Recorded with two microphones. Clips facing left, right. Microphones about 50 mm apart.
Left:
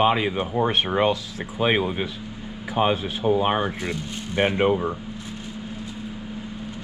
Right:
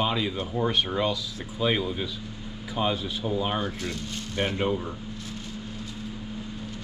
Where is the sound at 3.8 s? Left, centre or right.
Left.